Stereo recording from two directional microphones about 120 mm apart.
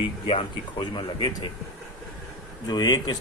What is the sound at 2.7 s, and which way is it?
Speech, 35° left (ahead or behind).